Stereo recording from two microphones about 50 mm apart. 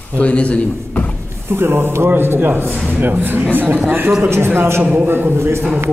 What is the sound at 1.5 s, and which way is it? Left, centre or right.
A man's voice, right.